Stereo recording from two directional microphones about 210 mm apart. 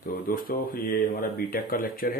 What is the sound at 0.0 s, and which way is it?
Speech, 45° left (ahead or behind).